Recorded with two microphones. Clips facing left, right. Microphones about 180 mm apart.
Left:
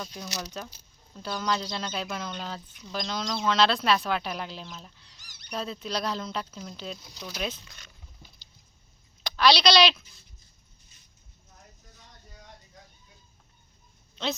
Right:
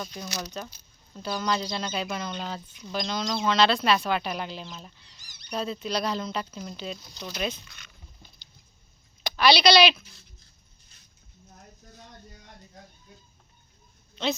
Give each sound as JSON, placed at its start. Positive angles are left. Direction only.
{"t": 0.0, "sound": "speech", "side_deg": 0}
{"t": 5.2, "sound": "a sound", "side_deg": 65}
{"t": 5.5, "sound": "speech", "side_deg": 0}
{"t": 8.2, "sound": "keys jangling", "side_deg": 5}
{"t": 9.2, "sound": "speech", "side_deg": -5}